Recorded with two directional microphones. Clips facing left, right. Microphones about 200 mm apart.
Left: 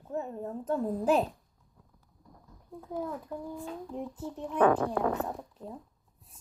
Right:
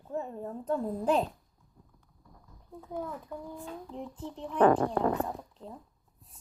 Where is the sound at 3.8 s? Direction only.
5° left (ahead or behind).